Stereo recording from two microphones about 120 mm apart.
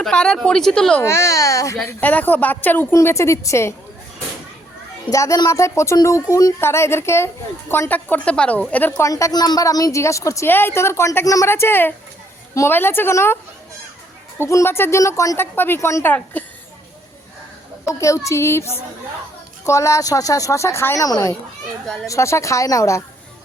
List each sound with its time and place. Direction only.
0.0 s speech: 5° left (ahead or behind)
1.0 s a woman's voice: 25° left (ahead or behind)
1.9 s a woman's voice: 15° left (ahead or behind)
5.1 s a woman's voice: 25° left (ahead or behind); by 8.6 s 10° left (ahead or behind)
9.0 s a woman's voice: 25° left (ahead or behind)
17.8 s a woman's voice: 25° left (ahead or behind)